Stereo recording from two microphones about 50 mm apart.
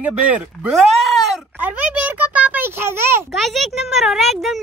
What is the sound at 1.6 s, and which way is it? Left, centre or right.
A child's voice, right.